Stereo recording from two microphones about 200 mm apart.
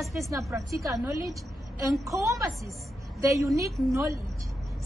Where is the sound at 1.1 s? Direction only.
15° right (ahead or behind).